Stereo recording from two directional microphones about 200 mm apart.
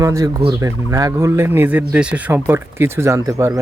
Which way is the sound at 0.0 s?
15° right (ahead or behind).